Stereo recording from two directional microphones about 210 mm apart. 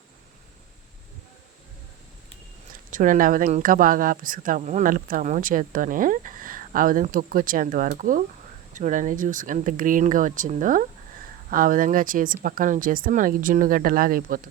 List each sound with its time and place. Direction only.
2.9 s speech: 40° right (ahead or behind)